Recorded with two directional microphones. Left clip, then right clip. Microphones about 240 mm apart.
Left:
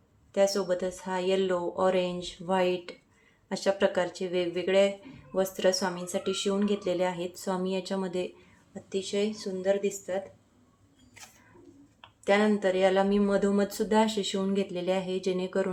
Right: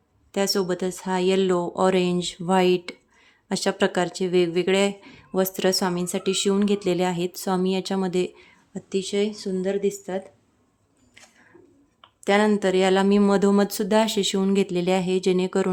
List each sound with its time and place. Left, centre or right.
0.3 s speech: right
12.2 s speech: right